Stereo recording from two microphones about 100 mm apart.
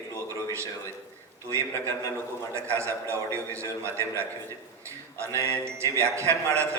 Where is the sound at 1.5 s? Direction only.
30° right (ahead or behind).